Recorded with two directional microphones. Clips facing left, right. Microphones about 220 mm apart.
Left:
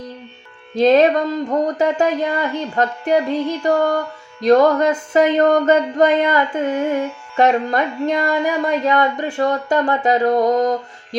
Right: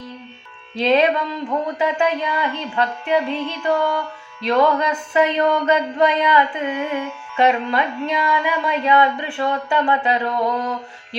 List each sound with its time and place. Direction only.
0.8 s speech: 45° left (ahead or behind)